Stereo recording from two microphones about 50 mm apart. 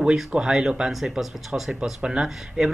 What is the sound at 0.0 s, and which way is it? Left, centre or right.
Speech, centre.